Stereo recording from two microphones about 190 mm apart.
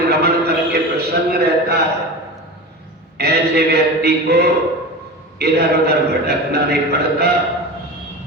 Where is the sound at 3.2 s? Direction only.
55° right (ahead or behind).